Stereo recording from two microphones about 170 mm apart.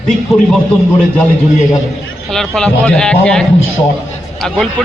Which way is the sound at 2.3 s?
5° left (ahead or behind).